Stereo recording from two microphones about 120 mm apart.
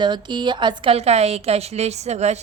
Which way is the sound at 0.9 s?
60° right (ahead or behind).